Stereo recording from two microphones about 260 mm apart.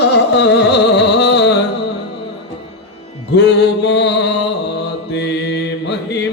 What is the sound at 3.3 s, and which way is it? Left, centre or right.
Music, left.